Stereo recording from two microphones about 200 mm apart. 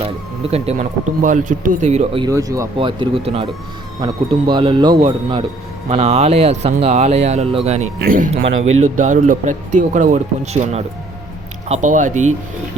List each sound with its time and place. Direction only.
0.5 s speech: 30° right (ahead or behind)
2.2 s speech: 15° right (ahead or behind)
8.0 s speech: 40° right (ahead or behind)